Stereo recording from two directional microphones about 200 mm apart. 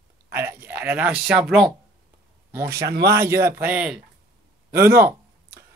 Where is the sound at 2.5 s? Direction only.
15° right (ahead or behind).